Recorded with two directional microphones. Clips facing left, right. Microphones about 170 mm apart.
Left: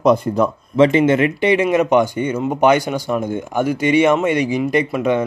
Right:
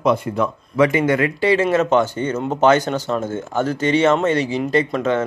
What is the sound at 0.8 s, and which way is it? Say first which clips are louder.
Speech: left 3 dB; 25° left (ahead or behind).